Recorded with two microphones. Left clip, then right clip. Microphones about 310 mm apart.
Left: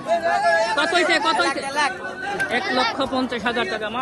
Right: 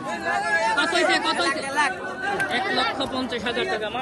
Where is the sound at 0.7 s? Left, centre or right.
Centre.